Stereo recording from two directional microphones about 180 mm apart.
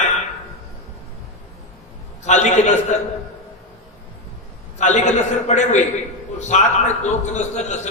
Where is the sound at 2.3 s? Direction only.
40° left (ahead or behind).